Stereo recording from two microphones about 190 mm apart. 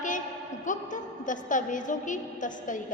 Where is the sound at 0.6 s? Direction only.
40° left (ahead or behind).